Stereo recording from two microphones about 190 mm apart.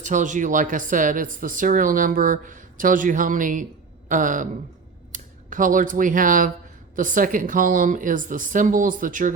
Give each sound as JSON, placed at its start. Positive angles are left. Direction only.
{"t": 0.0, "sound": "speech", "side_deg": -40}